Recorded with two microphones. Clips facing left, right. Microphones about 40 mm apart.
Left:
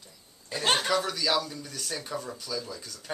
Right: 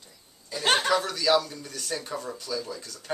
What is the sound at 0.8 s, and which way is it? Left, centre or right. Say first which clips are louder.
Speech: right 3 dB; centre.